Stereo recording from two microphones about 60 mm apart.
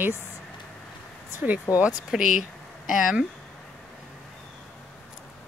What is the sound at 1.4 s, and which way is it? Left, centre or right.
Speech, right.